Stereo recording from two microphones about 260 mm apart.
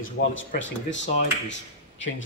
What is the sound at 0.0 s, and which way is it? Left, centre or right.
Speech, left.